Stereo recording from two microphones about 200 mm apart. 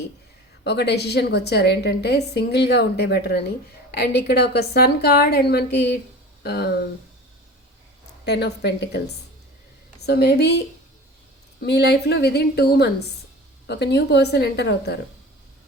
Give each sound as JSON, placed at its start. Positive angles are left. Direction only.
{"t": 0.6, "sound": "a woman's voice", "side_deg": 55}
{"t": 8.2, "sound": "a woman's voice", "side_deg": 55}
{"t": 10.0, "sound": "a woman's voice", "side_deg": 55}
{"t": 11.6, "sound": "a woman's voice", "side_deg": 55}